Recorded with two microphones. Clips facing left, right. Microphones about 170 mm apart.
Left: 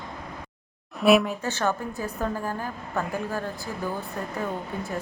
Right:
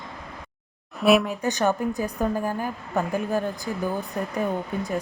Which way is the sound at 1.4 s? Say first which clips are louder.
Right 4 dB; 15° right (ahead or behind).